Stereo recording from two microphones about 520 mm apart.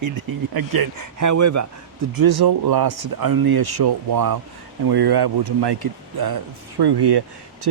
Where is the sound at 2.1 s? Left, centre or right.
Right.